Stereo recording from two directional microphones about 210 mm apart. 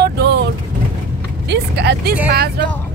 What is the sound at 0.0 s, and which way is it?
Vehicle, 50° right (ahead or behind).